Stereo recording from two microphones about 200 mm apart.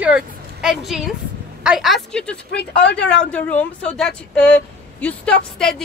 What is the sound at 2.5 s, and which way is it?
Speech, 60° left (ahead or behind).